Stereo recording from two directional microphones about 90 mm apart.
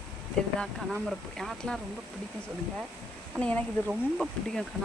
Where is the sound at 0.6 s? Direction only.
5° left (ahead or behind).